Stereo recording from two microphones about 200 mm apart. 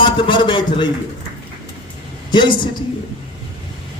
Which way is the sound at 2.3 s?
25° left (ahead or behind).